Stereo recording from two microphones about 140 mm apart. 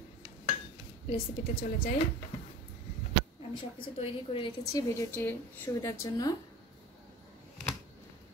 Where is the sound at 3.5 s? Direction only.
40° left (ahead or behind).